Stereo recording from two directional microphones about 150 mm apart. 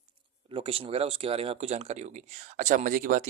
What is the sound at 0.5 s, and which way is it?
Speech, 40° right (ahead or behind).